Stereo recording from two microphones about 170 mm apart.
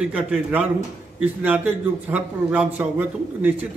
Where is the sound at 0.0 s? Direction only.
5° right (ahead or behind).